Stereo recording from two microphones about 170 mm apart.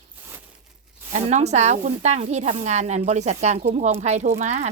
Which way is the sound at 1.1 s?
40° right (ahead or behind).